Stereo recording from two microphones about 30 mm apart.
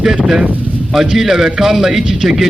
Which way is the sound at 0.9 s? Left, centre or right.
Centre.